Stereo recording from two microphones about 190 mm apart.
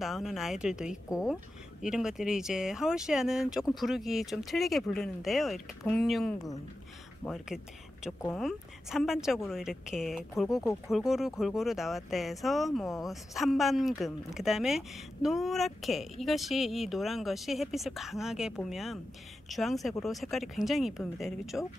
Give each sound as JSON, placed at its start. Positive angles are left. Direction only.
{"t": 0.0, "sound": "speech", "side_deg": 0}
{"t": 10.5, "sound": "speech", "side_deg": 15}
{"t": 10.9, "sound": "speech", "side_deg": 0}